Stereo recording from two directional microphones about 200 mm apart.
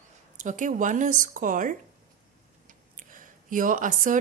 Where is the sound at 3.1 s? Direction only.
40° right (ahead or behind).